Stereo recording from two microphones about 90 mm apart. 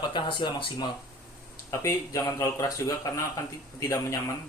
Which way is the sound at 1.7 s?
35° left (ahead or behind).